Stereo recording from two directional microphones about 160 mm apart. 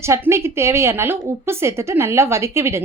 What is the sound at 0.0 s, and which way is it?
A woman's voice, 15° right (ahead or behind).